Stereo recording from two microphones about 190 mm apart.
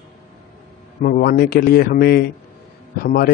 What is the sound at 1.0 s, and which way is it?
A man's voice, 50° left (ahead or behind).